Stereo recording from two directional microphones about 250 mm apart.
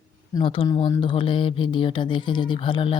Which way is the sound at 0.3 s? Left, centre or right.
Left.